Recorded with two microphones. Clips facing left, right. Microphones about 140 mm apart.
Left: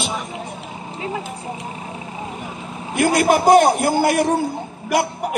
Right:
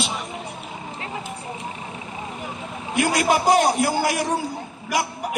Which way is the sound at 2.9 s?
50° left (ahead or behind).